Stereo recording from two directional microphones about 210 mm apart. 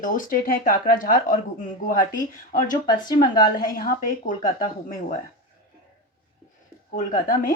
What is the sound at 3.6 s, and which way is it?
Speech, 40° left (ahead or behind).